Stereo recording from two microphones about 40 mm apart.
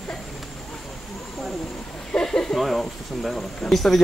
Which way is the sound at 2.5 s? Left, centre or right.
Centre.